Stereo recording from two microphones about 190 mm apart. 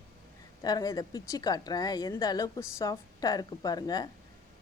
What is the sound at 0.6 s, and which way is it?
A woman's voice, 20° left (ahead or behind).